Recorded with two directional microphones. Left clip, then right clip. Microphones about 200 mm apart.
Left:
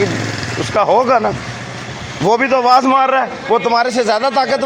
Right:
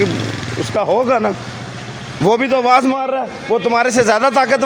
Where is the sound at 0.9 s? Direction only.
30° right (ahead or behind).